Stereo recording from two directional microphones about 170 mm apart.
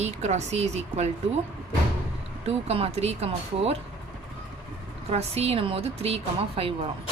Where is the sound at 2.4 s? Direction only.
35° right (ahead or behind).